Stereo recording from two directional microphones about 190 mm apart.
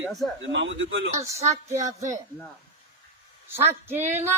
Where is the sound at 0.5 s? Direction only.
80° right.